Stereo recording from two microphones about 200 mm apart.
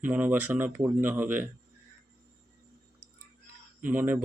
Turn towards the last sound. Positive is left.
turn(degrees=-10)  # may be behind; listen again after turning